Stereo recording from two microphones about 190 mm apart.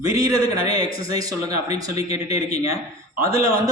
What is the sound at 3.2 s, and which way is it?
Speech, 15° right (ahead or behind).